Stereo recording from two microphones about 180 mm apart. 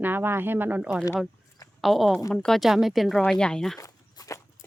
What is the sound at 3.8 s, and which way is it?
Walk, 20° left (ahead or behind).